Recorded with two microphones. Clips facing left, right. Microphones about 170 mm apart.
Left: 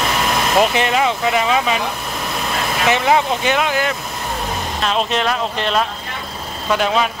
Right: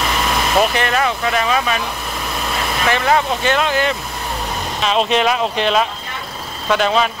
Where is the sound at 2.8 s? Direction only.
15° left (ahead or behind).